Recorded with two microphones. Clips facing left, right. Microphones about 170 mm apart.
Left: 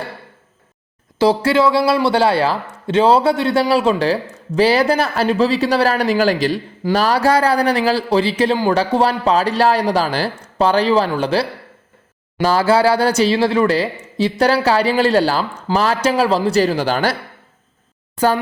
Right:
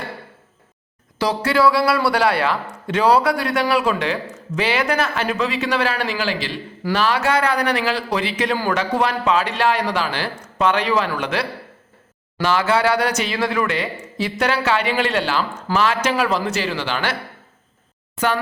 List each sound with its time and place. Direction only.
1.2 s speech: 25° left (ahead or behind)